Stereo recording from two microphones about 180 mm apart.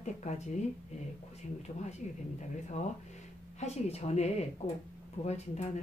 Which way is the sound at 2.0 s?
40° left (ahead or behind).